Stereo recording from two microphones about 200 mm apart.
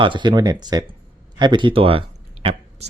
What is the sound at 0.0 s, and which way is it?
Speech, 25° right (ahead or behind).